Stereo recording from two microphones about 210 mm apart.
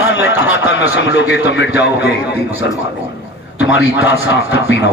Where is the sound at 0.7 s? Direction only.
55° left (ahead or behind).